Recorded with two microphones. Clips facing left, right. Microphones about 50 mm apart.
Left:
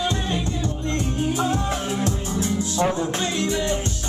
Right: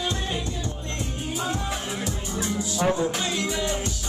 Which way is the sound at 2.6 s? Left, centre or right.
Left.